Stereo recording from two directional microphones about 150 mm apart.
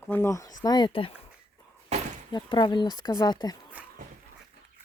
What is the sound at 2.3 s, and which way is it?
Speech, 30° left (ahead or behind).